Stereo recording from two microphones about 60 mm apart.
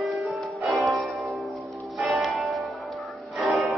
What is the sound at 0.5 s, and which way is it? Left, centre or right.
Music, right.